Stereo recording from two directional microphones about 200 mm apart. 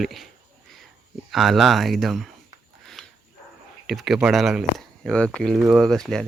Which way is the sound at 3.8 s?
Centre (ahead or behind).